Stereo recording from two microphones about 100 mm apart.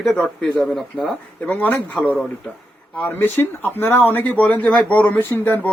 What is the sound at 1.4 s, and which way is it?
Speech, 15° left (ahead or behind).